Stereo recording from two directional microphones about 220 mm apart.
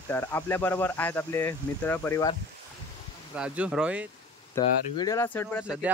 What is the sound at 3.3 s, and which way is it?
Speech, 5° right (ahead or behind).